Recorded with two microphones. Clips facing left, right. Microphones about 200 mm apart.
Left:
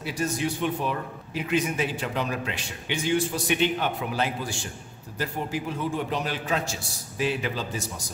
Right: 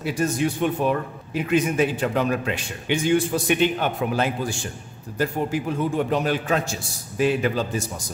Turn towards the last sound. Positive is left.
turn(degrees=-50)  # may be behind; listen again after turning